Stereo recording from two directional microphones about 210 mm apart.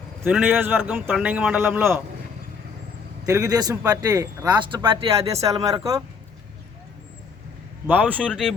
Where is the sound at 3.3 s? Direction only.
15° right (ahead or behind).